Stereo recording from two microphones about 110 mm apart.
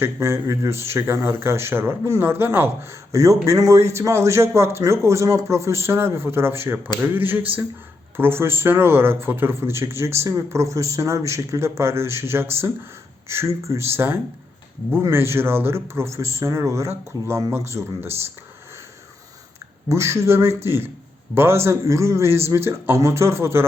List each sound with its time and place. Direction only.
0.0 s speech: 25° right (ahead or behind)
3.1 s speech: 30° right (ahead or behind)
7.0 s a sound: 20° right (ahead or behind)
8.1 s speech: 20° right (ahead or behind)
19.9 s speech: 25° right (ahead or behind)